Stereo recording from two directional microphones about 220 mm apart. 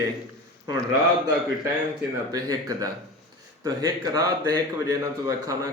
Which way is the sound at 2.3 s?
15° right (ahead or behind).